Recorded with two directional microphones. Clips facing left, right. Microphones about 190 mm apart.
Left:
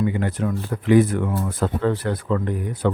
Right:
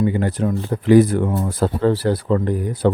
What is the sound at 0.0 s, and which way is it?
Speech, 35° right (ahead or behind).